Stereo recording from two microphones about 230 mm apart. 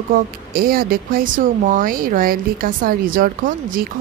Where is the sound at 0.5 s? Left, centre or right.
Right.